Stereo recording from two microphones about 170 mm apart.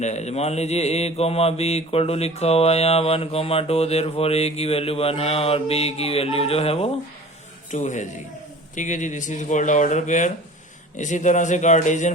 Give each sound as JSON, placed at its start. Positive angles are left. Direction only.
{"t": 0.0, "sound": "mantra", "side_deg": 40}
{"t": 7.7, "sound": "speech", "side_deg": 45}